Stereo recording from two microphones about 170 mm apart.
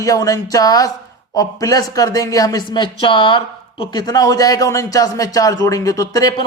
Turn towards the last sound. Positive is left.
turn(degrees=20)  # may be behind; listen again after turning